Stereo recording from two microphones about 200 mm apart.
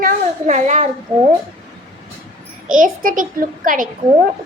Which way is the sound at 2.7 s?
40° right (ahead or behind).